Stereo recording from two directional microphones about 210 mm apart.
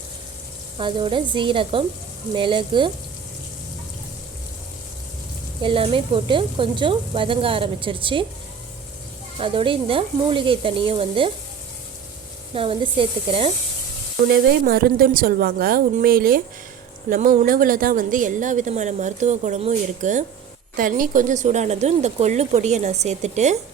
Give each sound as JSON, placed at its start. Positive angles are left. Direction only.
{"t": 0.8, "sound": "speech", "side_deg": -25}
{"t": 5.6, "sound": "speech", "side_deg": -25}
{"t": 9.4, "sound": "speech", "side_deg": -25}
{"t": 12.5, "sound": "speech", "side_deg": -25}
{"t": 14.3, "sound": "a woman's voice", "side_deg": -45}